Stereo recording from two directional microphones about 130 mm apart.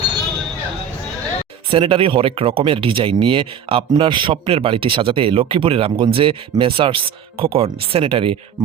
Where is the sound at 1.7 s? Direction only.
45° right (ahead or behind).